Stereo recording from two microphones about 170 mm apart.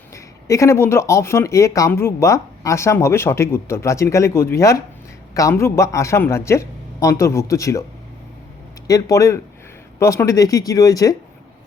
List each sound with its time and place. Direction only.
0.1 s speech: 15° left (ahead or behind)
8.9 s speech: 20° left (ahead or behind)